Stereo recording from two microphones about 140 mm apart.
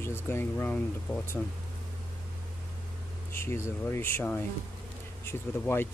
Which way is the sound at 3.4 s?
20° left (ahead or behind).